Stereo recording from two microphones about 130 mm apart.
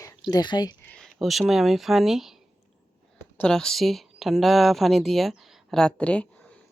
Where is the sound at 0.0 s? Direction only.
30° left (ahead or behind).